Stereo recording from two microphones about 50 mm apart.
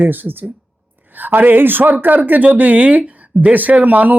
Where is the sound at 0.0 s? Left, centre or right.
Right.